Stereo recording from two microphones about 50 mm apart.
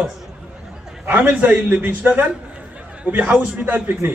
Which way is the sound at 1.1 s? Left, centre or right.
Right.